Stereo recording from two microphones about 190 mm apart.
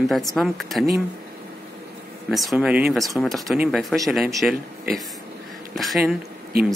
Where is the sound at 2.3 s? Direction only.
Centre (ahead or behind).